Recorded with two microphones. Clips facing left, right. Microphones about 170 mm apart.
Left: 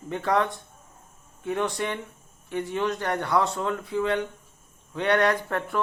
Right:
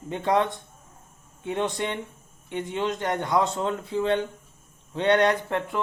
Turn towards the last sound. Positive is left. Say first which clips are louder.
# even
turn(degrees=-20)  # may be behind; listen again after turning